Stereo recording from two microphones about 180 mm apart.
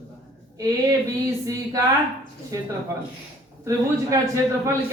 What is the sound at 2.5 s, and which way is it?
Speech, 20° right (ahead or behind).